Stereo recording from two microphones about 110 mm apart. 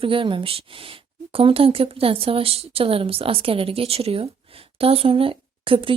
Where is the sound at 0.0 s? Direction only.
50° right (ahead or behind).